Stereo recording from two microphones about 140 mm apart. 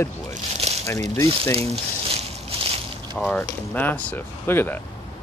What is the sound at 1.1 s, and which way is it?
Speech, 20° left (ahead or behind).